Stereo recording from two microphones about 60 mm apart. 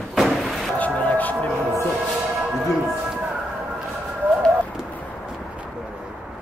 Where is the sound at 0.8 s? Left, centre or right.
Left.